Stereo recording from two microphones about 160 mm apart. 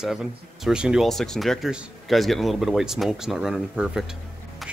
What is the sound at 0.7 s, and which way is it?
Speech, 5° right (ahead or behind).